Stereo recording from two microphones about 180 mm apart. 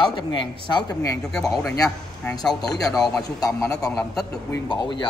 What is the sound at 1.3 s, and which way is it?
Speech, centre (ahead or behind).